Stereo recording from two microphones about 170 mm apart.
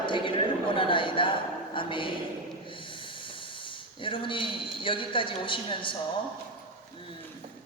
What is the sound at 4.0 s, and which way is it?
A woman's voice, 30° left (ahead or behind).